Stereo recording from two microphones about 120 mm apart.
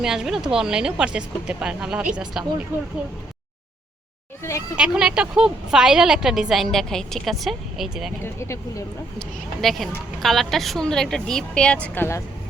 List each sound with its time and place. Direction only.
0.0 s a woman's voice: 5° right (ahead or behind)
4.8 s a woman's voice: 5° right (ahead or behind)
8.2 s speech: 25° left (ahead or behind)
9.1 s a woman's voice: centre (ahead or behind)